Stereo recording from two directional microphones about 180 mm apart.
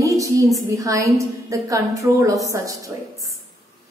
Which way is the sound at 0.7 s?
20° right (ahead or behind).